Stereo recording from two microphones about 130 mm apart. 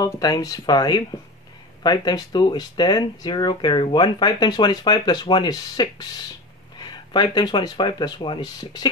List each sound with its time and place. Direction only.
0.0 s speech: 30° left (ahead or behind)